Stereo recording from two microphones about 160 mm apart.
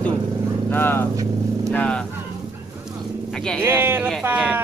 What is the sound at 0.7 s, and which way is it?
Speech, 15° left (ahead or behind).